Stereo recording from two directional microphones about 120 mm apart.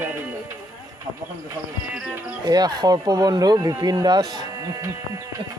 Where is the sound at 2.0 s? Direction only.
15° right (ahead or behind).